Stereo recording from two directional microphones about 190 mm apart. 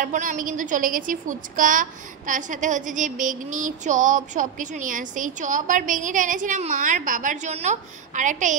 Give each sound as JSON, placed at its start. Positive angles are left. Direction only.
{"t": 0.0, "sound": "a woman's voice", "side_deg": -45}